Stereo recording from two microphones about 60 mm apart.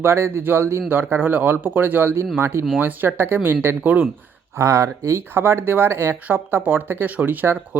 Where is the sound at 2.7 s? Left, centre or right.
Right.